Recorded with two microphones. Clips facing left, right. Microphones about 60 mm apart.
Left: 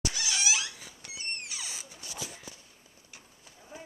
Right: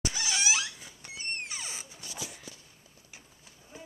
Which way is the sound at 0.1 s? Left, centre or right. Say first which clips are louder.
Right 1 dB; right.